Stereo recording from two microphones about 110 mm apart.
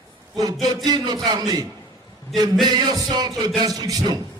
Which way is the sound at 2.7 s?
40° right (ahead or behind).